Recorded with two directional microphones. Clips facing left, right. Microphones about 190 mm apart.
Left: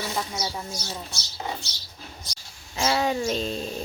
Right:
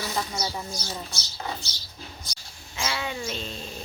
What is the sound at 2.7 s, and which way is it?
Speech, 40° left (ahead or behind).